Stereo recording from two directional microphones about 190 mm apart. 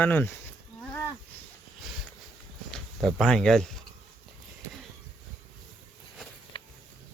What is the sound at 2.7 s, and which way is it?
Speech, 5° left (ahead or behind).